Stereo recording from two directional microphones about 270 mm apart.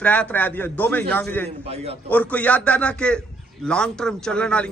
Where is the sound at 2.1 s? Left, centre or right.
Centre.